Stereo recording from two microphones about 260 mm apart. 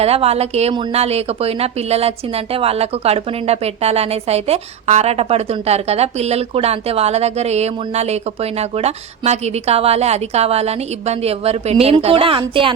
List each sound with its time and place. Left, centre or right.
0.0 s a woman's voice: right